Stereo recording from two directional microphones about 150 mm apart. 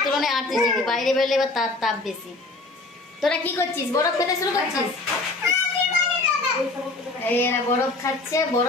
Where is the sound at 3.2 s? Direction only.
10° left (ahead or behind).